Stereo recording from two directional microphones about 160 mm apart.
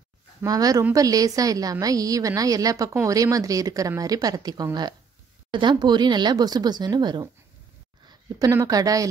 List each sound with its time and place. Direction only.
0.4 s a woman's voice: 25° right (ahead or behind)